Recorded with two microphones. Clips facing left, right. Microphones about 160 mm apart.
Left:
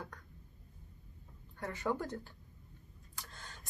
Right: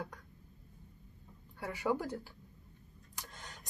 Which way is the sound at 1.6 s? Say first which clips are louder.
Right 2 dB; 10° right (ahead or behind).